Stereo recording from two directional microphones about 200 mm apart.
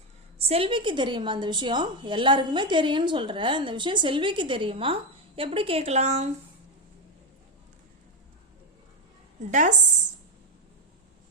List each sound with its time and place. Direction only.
0.3 s a woman's voice: 30° right (ahead or behind)
9.5 s speech: 40° right (ahead or behind)